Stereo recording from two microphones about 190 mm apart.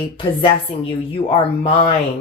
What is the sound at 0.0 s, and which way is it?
Speech, 25° left (ahead or behind).